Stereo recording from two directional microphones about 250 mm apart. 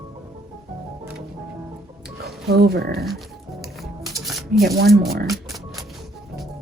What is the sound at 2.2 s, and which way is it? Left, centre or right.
Speech, right.